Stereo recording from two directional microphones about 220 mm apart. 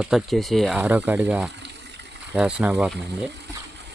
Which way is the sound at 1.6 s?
50° right (ahead or behind).